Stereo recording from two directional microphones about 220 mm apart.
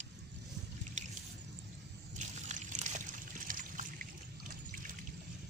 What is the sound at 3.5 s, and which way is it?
Trickle, 35° right (ahead or behind).